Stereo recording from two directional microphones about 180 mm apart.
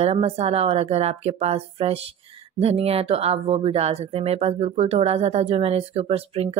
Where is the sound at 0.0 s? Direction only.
35° right (ahead or behind).